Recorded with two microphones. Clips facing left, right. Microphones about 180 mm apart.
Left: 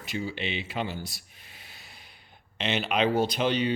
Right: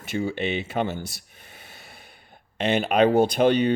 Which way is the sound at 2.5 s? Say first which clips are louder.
Right 7 dB; 50° right (ahead or behind).